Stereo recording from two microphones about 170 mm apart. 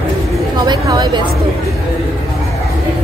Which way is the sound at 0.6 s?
25° right (ahead or behind).